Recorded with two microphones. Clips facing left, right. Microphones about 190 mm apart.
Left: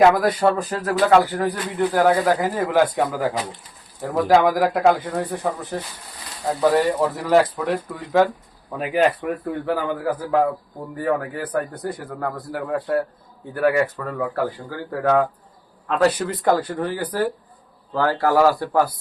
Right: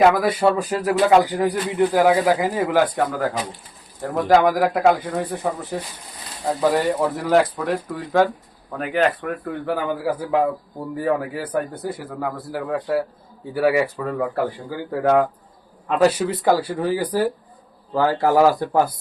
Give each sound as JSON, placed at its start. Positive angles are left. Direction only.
{"t": 0.0, "sound": "speech", "side_deg": 0}
{"t": 2.7, "sound": "speech", "side_deg": 0}
{"t": 9.6, "sound": "speech", "side_deg": -5}